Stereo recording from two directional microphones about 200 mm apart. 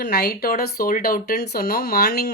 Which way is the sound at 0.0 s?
50° left (ahead or behind).